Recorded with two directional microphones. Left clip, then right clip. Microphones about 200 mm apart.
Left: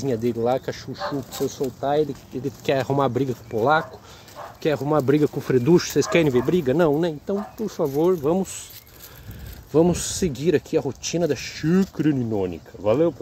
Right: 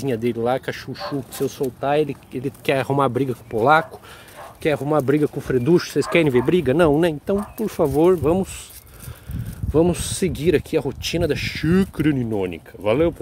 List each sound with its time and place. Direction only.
0.0 s speech: 15° right (ahead or behind)
4.6 s speech: 5° right (ahead or behind)
6.1 s speech: 10° right (ahead or behind)
9.7 s speech: 5° right (ahead or behind)